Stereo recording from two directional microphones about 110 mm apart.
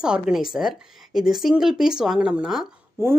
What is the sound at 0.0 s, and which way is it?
Speech, 5° right (ahead or behind).